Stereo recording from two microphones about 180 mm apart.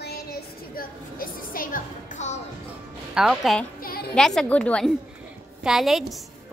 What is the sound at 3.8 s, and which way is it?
Music, 55° left (ahead or behind).